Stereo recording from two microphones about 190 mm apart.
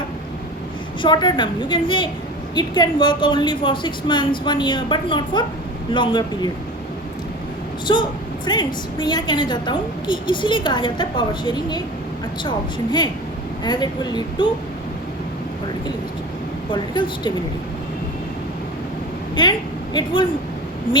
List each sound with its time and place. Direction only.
1.0 s a woman's voice: 25° left (ahead or behind)
7.9 s a woman's voice: 25° left (ahead or behind)
16.7 s a woman's voice: 25° left (ahead or behind)
19.4 s speech: 20° left (ahead or behind)